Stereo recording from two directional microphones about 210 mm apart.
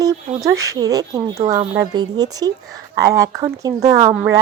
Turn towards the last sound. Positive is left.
turn(degrees=-15)  # may be behind; listen again after turning